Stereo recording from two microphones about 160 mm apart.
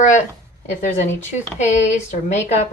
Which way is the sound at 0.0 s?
50° left (ahead or behind).